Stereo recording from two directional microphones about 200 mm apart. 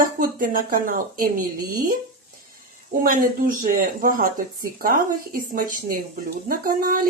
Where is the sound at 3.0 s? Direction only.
40° right (ahead or behind).